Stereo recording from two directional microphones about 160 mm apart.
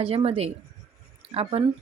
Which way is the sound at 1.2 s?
40° right (ahead or behind).